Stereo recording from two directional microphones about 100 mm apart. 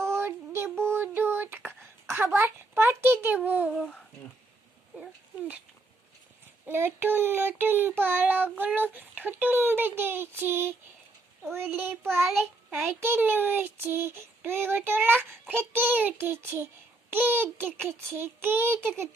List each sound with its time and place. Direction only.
0.0 s a sound: 25° right (ahead or behind)
6.7 s child singing: 20° right (ahead or behind)
13.0 s child singing: 20° right (ahead or behind)